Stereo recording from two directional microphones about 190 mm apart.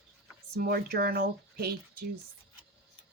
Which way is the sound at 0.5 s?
50° right (ahead or behind).